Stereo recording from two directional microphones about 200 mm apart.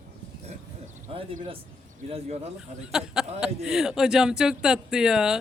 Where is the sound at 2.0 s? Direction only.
30° right (ahead or behind).